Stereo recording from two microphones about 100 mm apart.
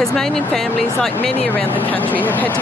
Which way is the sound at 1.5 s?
20° left (ahead or behind).